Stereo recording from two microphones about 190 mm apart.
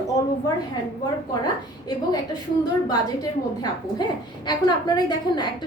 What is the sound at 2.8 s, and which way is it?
A woman's voice, 20° left (ahead or behind).